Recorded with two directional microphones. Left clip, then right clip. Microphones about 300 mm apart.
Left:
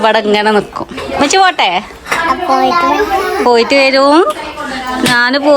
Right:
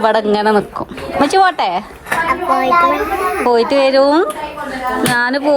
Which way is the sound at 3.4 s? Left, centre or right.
Centre.